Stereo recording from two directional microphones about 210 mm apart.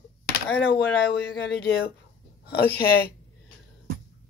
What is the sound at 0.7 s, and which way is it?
Speech, 50° left (ahead or behind).